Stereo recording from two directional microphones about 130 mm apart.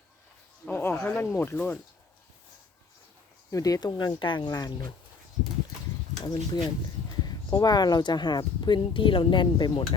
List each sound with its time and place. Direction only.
0.6 s speech: 15° left (ahead or behind)
3.5 s speech: 30° left (ahead or behind)
6.2 s speech: 35° left (ahead or behind)